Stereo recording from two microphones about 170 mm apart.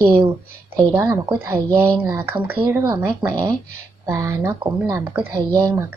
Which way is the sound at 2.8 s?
25° right (ahead or behind).